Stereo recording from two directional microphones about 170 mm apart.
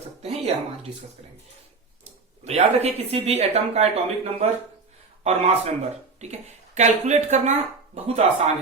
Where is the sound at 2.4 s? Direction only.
40° right (ahead or behind).